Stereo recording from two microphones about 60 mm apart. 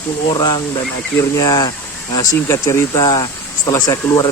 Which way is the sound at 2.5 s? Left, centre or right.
Left.